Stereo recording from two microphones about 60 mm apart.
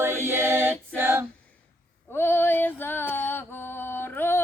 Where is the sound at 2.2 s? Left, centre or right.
Left.